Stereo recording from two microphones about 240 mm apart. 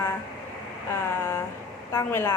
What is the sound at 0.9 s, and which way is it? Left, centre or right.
A woman's voice, centre.